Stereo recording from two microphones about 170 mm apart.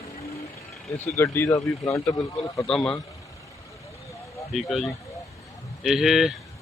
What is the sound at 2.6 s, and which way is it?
Speech, 5° left (ahead or behind).